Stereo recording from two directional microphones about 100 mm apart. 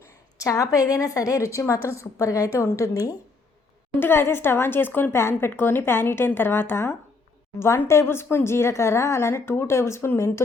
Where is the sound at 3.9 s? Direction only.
25° left (ahead or behind).